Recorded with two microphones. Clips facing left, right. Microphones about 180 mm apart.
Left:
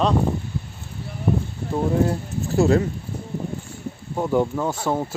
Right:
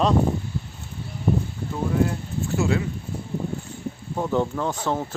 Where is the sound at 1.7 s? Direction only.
35° left (ahead or behind).